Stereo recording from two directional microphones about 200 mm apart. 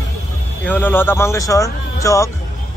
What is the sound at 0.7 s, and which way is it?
A man's voice, 10° left (ahead or behind).